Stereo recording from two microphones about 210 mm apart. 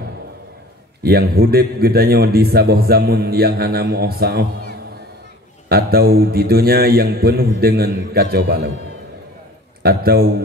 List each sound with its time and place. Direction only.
1.0 s a man's voice: 50° right (ahead or behind)
5.7 s a man's voice: 45° right (ahead or behind)
9.8 s a man's voice: 45° right (ahead or behind)